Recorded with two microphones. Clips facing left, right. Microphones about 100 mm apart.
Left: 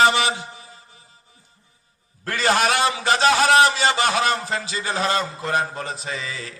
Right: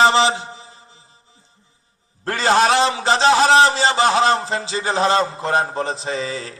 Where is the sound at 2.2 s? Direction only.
25° right (ahead or behind).